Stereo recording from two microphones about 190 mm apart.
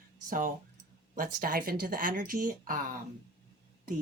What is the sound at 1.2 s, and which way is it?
Speech, 50° right (ahead or behind).